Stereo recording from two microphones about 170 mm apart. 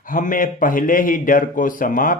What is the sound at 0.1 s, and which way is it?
A man's voice, 50° left (ahead or behind).